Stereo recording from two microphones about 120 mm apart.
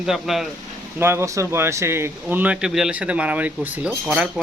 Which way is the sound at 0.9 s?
20° right (ahead or behind).